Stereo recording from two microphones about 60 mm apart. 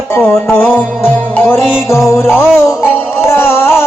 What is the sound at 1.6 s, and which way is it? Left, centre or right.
Music, left.